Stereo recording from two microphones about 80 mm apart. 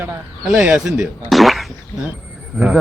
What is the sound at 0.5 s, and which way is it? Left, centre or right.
Speech, centre.